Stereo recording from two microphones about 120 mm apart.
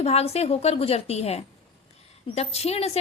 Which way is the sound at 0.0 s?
60° left (ahead or behind).